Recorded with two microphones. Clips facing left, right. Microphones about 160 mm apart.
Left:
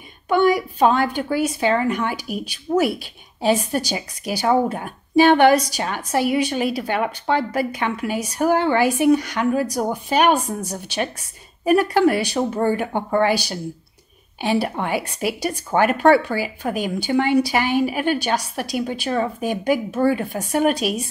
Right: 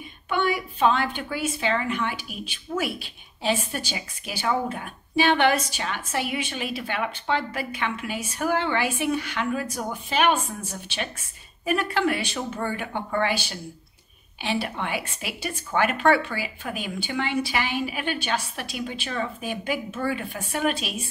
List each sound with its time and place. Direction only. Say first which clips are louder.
0.3 s a woman's voice: left 8 dB; 40° left (ahead or behind)